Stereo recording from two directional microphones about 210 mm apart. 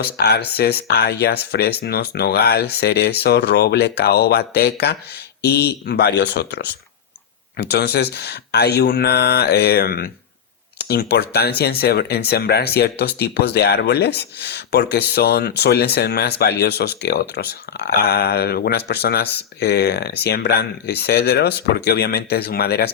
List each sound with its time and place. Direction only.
0.0 s speech: 50° left (ahead or behind)